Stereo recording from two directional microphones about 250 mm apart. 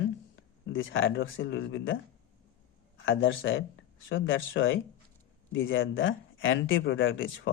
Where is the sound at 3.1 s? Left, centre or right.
Left.